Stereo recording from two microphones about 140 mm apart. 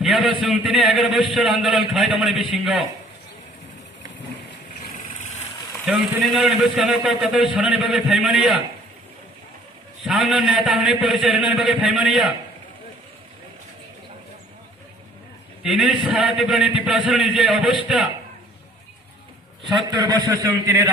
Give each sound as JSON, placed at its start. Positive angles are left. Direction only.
{"t": 0.0, "sound": "a sound", "side_deg": 0}
{"t": 0.4, "sound": "a man's voice", "side_deg": 0}
{"t": 5.8, "sound": "a man's voice", "side_deg": -5}
{"t": 10.0, "sound": "a man's voice", "side_deg": 0}
{"t": 15.6, "sound": "a man's voice", "side_deg": 0}
{"t": 19.7, "sound": "a man's voice", "side_deg": -30}